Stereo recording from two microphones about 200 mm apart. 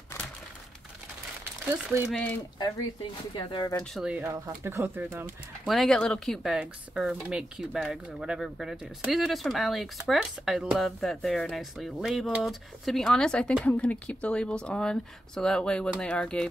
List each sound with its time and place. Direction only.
2.1 s speech: 10° left (ahead or behind)
2.6 s speech: 25° left (ahead or behind)
3.8 s speech: centre (ahead or behind)
5.7 s speech: centre (ahead or behind)